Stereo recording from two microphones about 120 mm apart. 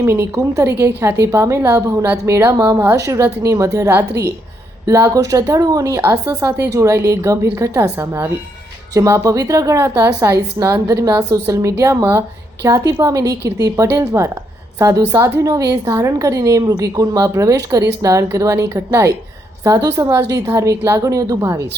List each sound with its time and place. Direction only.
0.0 s a woman's voice: 20° right (ahead or behind)